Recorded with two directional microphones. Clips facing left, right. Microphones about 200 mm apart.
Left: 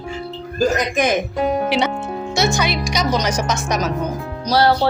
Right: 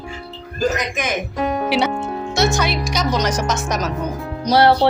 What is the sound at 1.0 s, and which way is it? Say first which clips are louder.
Speech: left 6 dB; 35° left (ahead or behind).